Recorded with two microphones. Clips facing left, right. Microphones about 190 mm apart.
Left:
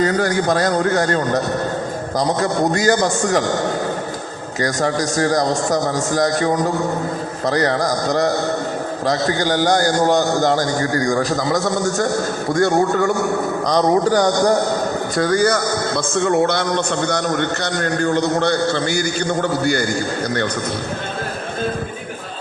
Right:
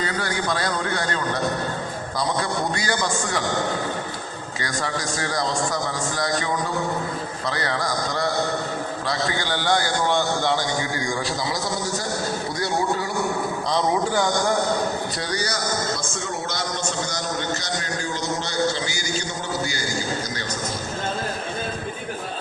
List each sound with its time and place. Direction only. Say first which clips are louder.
0.0 s a man's voice: left 9 dB; 45° left (ahead or behind)
4.6 s a man's voice: left 9 dB; 45° left (ahead or behind)